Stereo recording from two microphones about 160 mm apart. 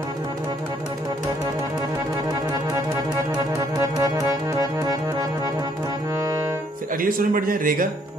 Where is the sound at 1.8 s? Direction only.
25° right (ahead or behind).